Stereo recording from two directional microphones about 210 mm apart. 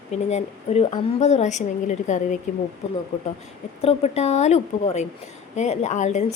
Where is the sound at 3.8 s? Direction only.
30° left (ahead or behind).